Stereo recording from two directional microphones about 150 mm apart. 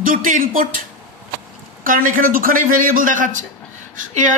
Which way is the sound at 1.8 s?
65° right (ahead or behind).